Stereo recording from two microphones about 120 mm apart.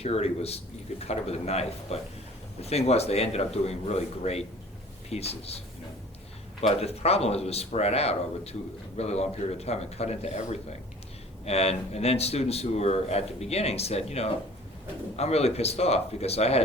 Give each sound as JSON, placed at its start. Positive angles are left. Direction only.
{"t": 0.0, "sound": "a man's voice", "side_deg": 60}